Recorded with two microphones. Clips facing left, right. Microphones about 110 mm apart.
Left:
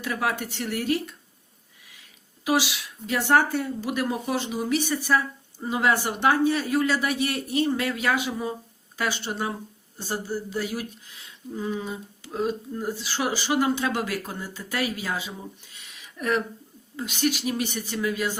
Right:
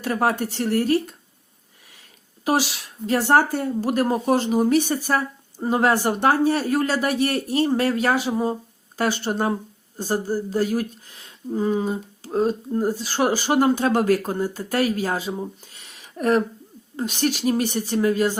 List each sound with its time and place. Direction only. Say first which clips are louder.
0.0 s speech: right 6 dB; 45° right (ahead or behind)
2.4 s speech: right 2 dB; 40° right (ahead or behind)